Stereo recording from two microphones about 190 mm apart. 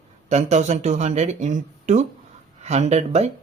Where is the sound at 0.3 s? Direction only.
35° right (ahead or behind).